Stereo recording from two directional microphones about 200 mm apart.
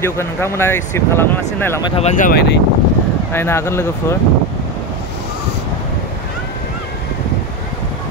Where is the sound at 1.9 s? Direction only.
35° left (ahead or behind).